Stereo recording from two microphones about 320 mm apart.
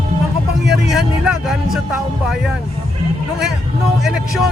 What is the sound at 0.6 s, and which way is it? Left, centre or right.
Speech, centre.